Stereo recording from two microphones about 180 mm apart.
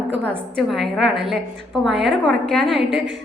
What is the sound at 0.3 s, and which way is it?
A woman's voice, centre (ahead or behind).